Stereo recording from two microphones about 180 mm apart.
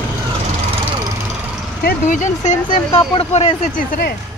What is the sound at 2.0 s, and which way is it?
Speech, 45° left (ahead or behind).